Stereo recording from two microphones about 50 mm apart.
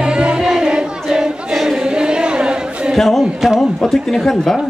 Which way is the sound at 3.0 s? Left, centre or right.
Centre.